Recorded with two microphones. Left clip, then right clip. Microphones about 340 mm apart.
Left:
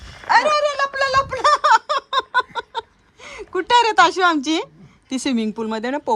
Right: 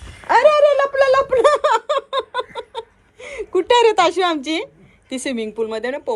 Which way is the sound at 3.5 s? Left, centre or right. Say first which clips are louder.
Right 4 dB; centre.